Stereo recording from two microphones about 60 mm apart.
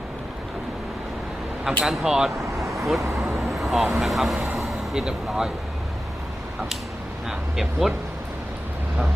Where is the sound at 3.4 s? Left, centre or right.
Centre.